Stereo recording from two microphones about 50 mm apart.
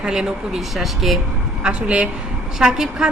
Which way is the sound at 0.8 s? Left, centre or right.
Centre.